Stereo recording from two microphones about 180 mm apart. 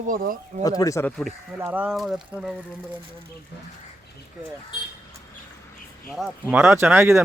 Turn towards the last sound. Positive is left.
turn(degrees=-15)  # may be behind; listen again after turning